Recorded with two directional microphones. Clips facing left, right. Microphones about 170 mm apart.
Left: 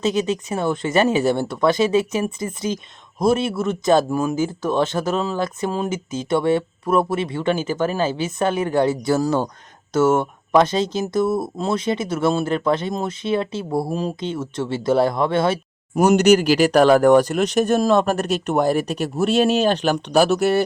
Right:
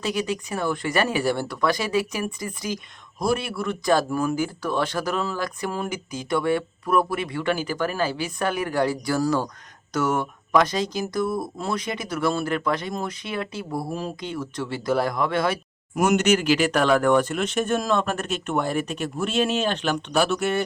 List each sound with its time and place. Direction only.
0.0 s speech: 25° left (ahead or behind)
16.0 s speech: 35° left (ahead or behind)